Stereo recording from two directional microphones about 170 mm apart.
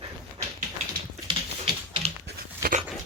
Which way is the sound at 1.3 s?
30° right (ahead or behind).